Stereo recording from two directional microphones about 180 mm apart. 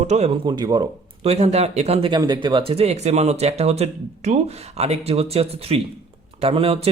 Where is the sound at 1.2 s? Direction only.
35° right (ahead or behind).